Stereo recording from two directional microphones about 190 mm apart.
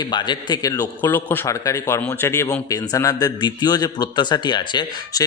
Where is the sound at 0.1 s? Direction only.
25° left (ahead or behind).